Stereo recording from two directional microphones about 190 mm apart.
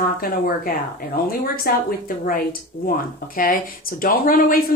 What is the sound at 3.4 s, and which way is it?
Speech, 45° left (ahead or behind).